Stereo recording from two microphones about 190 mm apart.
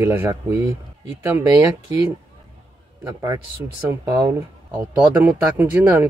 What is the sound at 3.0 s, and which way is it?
Speech, 15° right (ahead or behind).